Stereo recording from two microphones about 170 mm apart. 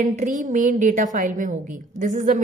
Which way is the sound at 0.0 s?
45° right (ahead or behind).